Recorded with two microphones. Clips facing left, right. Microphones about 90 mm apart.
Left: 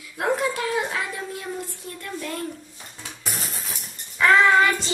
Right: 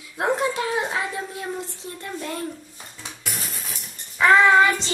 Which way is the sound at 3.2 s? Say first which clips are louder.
Left 1 dB; 35° left (ahead or behind).